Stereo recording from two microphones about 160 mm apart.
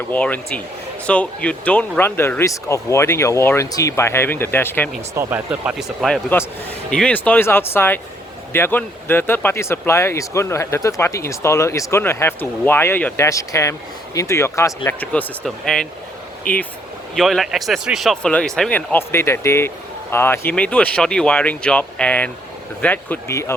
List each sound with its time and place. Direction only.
0.1 s speech: 10° left (ahead or behind)
5.1 s speech: 10° right (ahead or behind)
16.5 s speech: 60° left (ahead or behind)
17.2 s speech: centre (ahead or behind); by 23.6 s 15° left (ahead or behind)